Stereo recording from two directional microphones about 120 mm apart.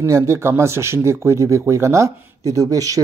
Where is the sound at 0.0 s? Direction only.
25° right (ahead or behind).